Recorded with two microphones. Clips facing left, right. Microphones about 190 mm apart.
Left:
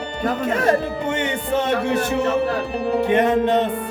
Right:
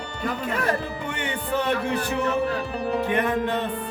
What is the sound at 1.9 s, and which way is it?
Music, 75° left (ahead or behind).